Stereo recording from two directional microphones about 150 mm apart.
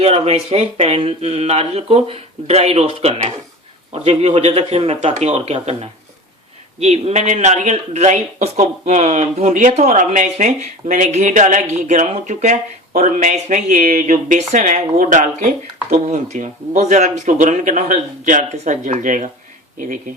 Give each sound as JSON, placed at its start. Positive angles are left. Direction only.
{"t": 0.0, "sound": "speech", "side_deg": -45}